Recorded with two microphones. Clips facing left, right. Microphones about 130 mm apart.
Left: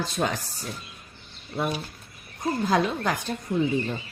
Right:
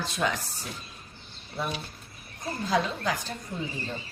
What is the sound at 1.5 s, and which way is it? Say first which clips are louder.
A woman's voice: left 5 dB; 50° left (ahead or behind).